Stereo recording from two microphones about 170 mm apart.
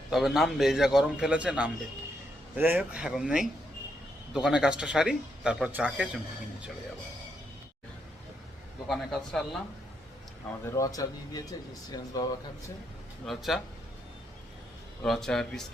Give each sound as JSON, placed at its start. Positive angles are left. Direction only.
{"t": 0.1, "sound": "speech", "side_deg": 0}
{"t": 8.9, "sound": "speech", "side_deg": 0}
{"t": 10.7, "sound": "speech", "side_deg": 20}
{"t": 13.2, "sound": "speech", "side_deg": 0}
{"t": 15.0, "sound": "speech", "side_deg": 0}